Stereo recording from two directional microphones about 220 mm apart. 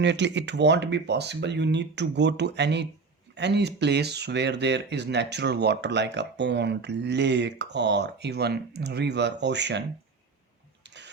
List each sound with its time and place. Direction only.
0.0 s speech: 50° right (ahead or behind)
10.8 s engine starting: 55° right (ahead or behind)